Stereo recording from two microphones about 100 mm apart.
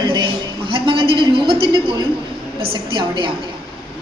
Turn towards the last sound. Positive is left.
turn(degrees=-55)  # may be behind; listen again after turning